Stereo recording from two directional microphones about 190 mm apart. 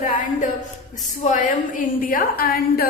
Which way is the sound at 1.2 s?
40° left (ahead or behind).